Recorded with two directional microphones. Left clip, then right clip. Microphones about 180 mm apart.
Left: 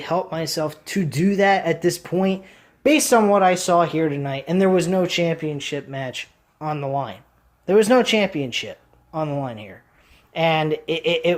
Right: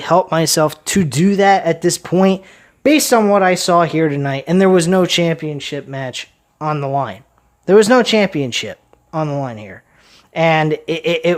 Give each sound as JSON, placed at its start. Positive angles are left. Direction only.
{"t": 0.0, "sound": "speech", "side_deg": -40}